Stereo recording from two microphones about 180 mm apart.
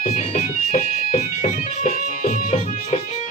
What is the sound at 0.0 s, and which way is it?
Music, 40° left (ahead or behind).